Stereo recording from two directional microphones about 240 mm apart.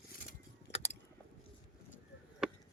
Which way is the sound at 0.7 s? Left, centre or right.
Left.